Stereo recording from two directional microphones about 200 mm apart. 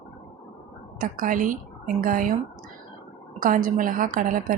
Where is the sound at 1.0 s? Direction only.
40° right (ahead or behind).